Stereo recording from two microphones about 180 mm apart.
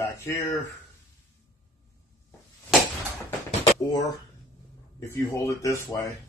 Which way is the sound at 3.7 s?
15° left (ahead or behind).